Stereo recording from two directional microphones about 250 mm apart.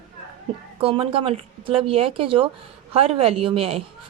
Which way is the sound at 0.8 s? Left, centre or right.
Right.